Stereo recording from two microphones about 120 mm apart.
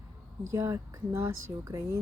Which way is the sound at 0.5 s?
25° right (ahead or behind).